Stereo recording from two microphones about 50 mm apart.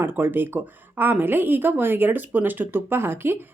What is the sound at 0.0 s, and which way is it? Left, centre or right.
Speech, right.